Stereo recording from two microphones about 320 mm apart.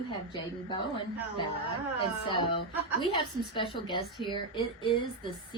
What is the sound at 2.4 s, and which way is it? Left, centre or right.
A woman's voice, centre.